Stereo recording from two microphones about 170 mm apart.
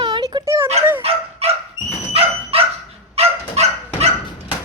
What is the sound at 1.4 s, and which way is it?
Dog, 35° right (ahead or behind).